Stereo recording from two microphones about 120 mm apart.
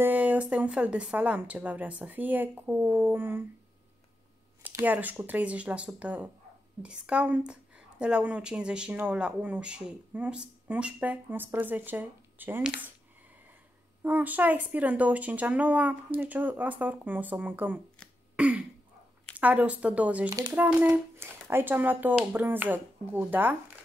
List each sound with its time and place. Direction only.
0.0 s speech: 15° right (ahead or behind)
4.6 s speech: 15° right (ahead or behind)
14.0 s speech: 15° right (ahead or behind)
18.3 s throat clearing: 10° right (ahead or behind)
19.3 s speech: 15° right (ahead or behind)
20.2 s speech: 35° right (ahead or behind)
20.5 s speech: 15° right (ahead or behind)